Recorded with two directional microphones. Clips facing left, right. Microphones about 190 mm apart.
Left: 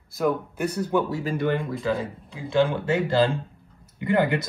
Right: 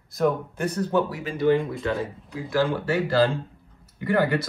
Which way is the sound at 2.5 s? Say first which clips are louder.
Left 2 dB; 20° left (ahead or behind).